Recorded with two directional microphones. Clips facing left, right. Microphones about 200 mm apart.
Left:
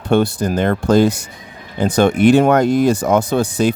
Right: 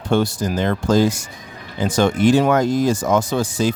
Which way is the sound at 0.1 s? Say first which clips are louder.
Left 3 dB; 60° left (ahead or behind).